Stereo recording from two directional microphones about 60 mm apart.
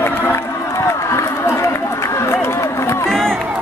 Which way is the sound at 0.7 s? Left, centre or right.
Left.